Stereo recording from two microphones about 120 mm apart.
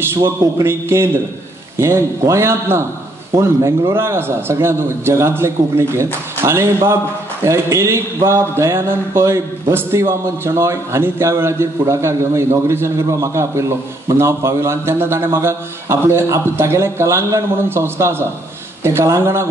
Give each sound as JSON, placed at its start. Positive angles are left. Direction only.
{"t": 0.1, "sound": "a man's voice", "side_deg": -20}